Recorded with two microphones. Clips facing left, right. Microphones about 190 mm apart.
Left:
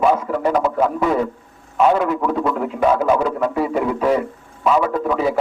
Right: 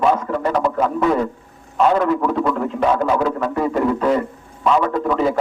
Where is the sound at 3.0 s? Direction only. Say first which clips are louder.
Left 1 dB; 5° left (ahead or behind).